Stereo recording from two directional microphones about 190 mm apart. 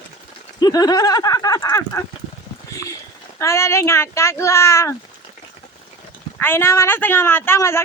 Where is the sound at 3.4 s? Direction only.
15° left (ahead or behind).